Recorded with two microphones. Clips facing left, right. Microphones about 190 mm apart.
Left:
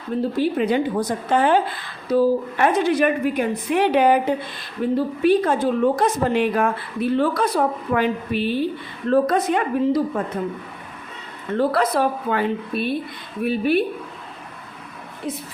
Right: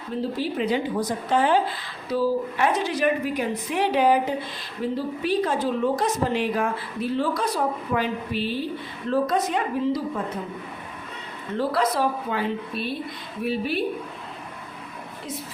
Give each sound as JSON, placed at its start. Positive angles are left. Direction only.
{"t": 0.3, "sound": "a woman's voice", "side_deg": 55}
{"t": 11.5, "sound": "a woman's voice", "side_deg": 55}